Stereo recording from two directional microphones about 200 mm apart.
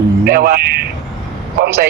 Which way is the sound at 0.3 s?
45° right (ahead or behind).